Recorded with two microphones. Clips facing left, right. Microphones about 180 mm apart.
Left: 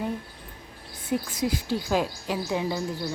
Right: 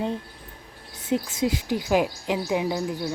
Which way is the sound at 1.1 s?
20° right (ahead or behind).